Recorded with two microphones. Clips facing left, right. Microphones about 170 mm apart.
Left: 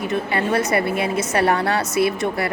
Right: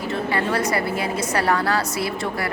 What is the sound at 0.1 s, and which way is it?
A woman's voice, 25° left (ahead or behind).